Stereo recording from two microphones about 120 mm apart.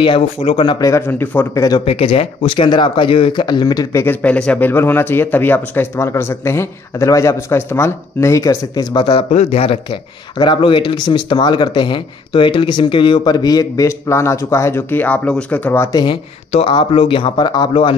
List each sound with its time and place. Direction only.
0.0 s speech: 45° left (ahead or behind); by 1.0 s 30° left (ahead or behind)
1.0 s speech: 15° left (ahead or behind)
1.5 s speech: 30° left (ahead or behind)
1.9 s speech: 55° left (ahead or behind); by 4.0 s 30° left (ahead or behind)
4.0 s speech: 15° left (ahead or behind)
8.9 s speech: 45° left (ahead or behind)
9.3 s speech: 60° left (ahead or behind)
10.3 s speech: 40° left (ahead or behind); by 15.9 s 15° left (ahead or behind)
15.9 s speech: 35° left (ahead or behind)
16.5 s speech: 45° left (ahead or behind)